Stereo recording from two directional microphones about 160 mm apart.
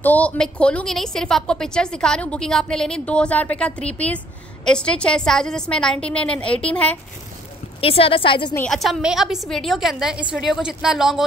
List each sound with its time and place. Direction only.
0.0 s a woman's voice: 10° left (ahead or behind)
7.8 s a woman's voice: 35° left (ahead or behind)
8.6 s a woman's voice: centre (ahead or behind)